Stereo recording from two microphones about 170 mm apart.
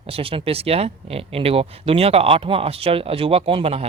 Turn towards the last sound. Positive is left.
turn(degrees=-35)  # may be behind; listen again after turning